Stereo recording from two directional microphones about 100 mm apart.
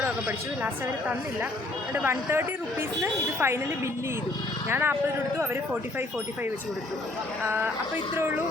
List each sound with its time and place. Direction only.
0.0 s speech: 15° right (ahead or behind)
4.7 s speech: 20° right (ahead or behind)
7.4 s speech: 20° right (ahead or behind)